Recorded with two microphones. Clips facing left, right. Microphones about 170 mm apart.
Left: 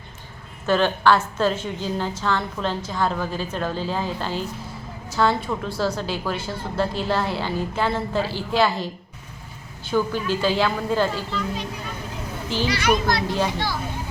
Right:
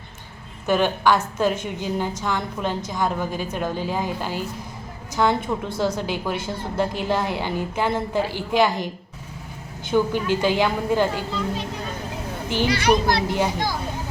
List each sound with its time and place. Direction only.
0.7 s a woman's voice: 15° right (ahead or behind)
12.7 s a child's voice: 30° right (ahead or behind)
13.2 s a woman's voice: 15° right (ahead or behind)